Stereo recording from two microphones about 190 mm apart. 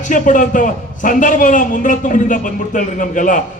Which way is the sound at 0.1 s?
45° left (ahead or behind).